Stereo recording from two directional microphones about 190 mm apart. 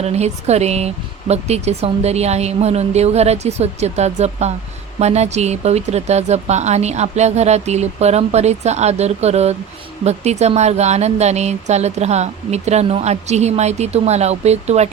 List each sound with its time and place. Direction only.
0.0 s speech: 35° right (ahead or behind)